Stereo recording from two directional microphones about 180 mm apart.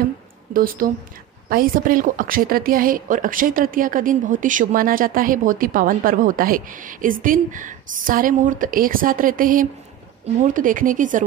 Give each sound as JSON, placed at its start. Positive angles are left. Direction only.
{"t": 0.5, "sound": "speech", "side_deg": -50}